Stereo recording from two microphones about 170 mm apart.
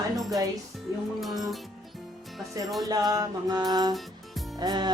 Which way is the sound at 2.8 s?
20° right (ahead or behind).